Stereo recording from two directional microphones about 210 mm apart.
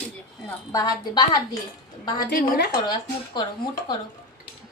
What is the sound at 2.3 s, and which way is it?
Speech, 50° left (ahead or behind).